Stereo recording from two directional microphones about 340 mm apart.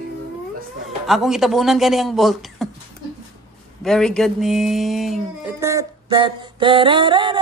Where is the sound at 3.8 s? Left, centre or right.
Centre.